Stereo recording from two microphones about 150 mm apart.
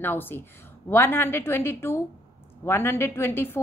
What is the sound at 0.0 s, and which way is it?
A woman's voice, 15° left (ahead or behind).